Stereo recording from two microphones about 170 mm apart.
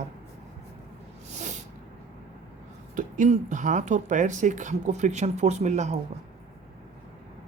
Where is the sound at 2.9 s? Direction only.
45° right (ahead or behind).